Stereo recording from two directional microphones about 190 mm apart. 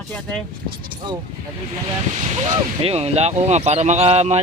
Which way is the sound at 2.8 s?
35° right (ahead or behind).